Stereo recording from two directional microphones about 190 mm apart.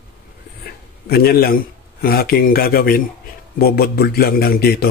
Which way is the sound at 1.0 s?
55° left (ahead or behind).